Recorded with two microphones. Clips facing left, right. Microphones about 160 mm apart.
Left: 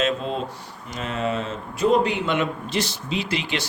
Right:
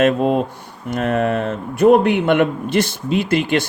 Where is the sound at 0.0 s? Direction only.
55° right (ahead or behind).